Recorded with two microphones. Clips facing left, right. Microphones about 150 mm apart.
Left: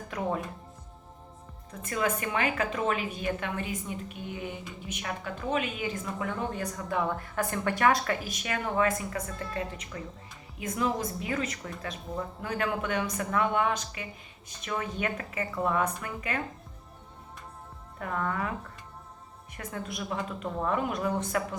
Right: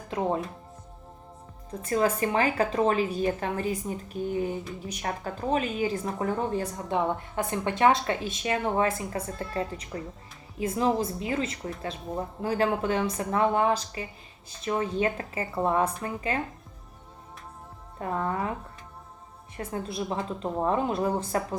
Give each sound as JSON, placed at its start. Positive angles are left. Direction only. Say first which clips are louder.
{"t": 0.1, "sound": "speech", "louder": "right 4 dB", "side_deg": -30}
{"t": 1.8, "sound": "a woman's voice", "louder": "right 5 dB", "side_deg": -35}
{"t": 18.0, "sound": "speech", "louder": "right 3 dB", "side_deg": -30}
{"t": 19.5, "sound": "a woman's voice", "louder": "right 5 dB", "side_deg": -30}